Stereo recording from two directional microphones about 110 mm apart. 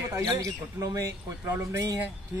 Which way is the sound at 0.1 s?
30° right (ahead or behind).